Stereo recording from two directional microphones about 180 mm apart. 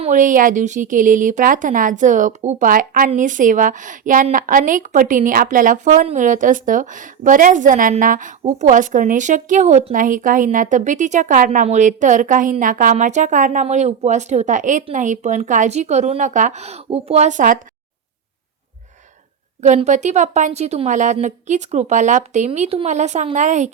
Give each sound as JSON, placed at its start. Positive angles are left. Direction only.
{"t": 0.0, "sound": "a woman's voice", "side_deg": -45}
{"t": 19.6, "sound": "a woman's voice", "side_deg": -40}